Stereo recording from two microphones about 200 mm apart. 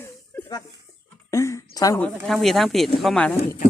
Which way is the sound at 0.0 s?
15° left (ahead or behind).